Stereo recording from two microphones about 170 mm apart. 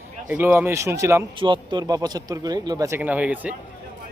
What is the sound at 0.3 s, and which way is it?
Speech, 10° right (ahead or behind).